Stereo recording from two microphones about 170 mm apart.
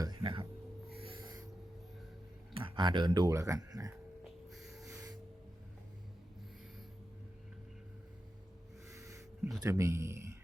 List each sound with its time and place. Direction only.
0.0 s a sound: 25° right (ahead or behind)
2.5 s speech: 30° right (ahead or behind)
4.2 s snort: centre (ahead or behind)
4.9 s music: 20° right (ahead or behind)
8.9 s a sound: 20° right (ahead or behind)
9.6 s speech: 20° right (ahead or behind)